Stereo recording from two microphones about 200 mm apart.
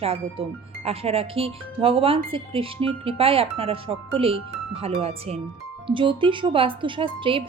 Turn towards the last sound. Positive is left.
turn(degrees=-25)  # may be behind; listen again after turning